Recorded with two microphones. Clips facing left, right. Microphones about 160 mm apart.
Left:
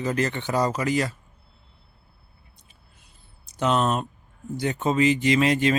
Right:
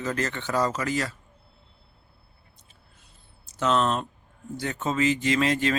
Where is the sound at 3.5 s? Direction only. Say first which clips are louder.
Left 1 dB; 15° left (ahead or behind).